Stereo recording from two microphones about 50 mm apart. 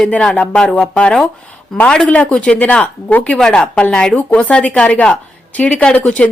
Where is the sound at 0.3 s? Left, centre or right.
Centre.